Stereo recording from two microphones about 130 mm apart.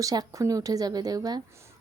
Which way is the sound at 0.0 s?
25° right (ahead or behind).